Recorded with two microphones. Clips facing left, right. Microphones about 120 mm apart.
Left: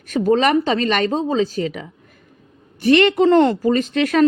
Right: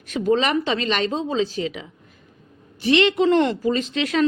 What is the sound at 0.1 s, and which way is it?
Speech, 45° left (ahead or behind).